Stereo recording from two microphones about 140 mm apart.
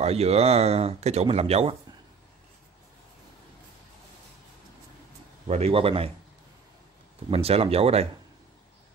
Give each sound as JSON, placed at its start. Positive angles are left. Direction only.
{"t": 0.0, "sound": "speech", "side_deg": -50}
{"t": 5.5, "sound": "speech", "side_deg": -45}
{"t": 7.2, "sound": "speech", "side_deg": -45}